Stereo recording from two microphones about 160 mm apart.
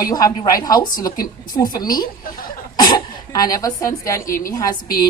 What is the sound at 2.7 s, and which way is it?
Cough, 25° left (ahead or behind).